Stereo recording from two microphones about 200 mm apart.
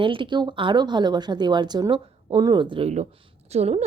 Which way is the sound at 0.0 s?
25° right (ahead or behind).